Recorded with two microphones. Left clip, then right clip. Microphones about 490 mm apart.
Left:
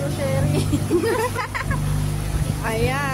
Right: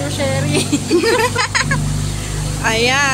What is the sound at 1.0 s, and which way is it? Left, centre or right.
Speech, left.